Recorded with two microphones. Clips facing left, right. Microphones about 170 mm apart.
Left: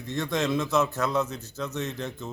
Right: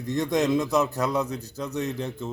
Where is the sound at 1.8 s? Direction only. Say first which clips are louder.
Right 6 dB; 35° right (ahead or behind).